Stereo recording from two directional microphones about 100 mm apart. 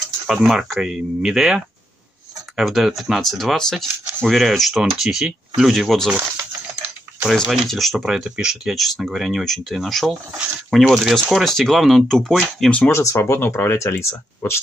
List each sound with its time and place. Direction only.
0.3 s speech: 5° right (ahead or behind)
7.2 s speech: 5° right (ahead or behind)
12.9 s speech: 30° left (ahead or behind)